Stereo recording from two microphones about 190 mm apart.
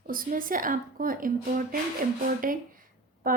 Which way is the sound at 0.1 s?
45° right (ahead or behind).